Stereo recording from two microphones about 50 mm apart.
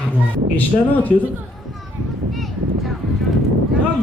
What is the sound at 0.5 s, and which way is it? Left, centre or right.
Speech, left.